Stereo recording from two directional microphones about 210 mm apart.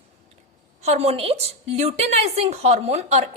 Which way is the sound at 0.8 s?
30° right (ahead or behind).